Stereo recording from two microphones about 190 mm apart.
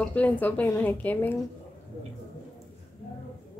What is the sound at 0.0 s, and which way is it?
A woman's voice, 10° left (ahead or behind).